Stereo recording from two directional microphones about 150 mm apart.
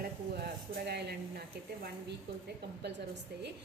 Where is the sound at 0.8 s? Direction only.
90° right.